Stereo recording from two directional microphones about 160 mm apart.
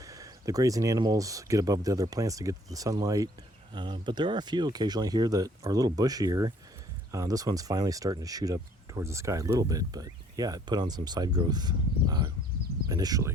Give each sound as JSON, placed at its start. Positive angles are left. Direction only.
{"t": 0.0, "sound": "speech", "side_deg": -20}